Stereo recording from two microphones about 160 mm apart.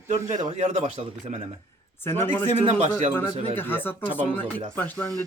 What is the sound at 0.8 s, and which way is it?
Speech, 40° right (ahead or behind).